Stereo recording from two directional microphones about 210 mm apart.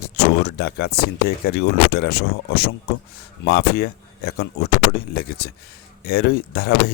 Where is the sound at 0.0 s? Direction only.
55° left (ahead or behind).